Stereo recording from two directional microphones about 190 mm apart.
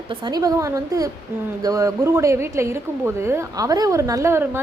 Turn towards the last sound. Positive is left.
turn(degrees=-10)  # may be behind; listen again after turning